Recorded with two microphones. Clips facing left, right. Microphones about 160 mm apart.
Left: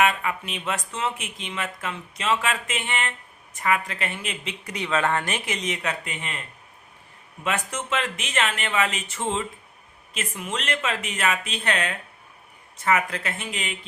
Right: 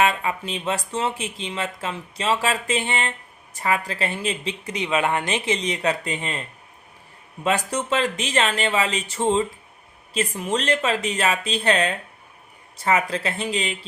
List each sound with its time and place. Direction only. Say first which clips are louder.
0.0 s speech: right 1 dB; 30° right (ahead or behind)
7.4 s speech: right 5 dB; 35° right (ahead or behind)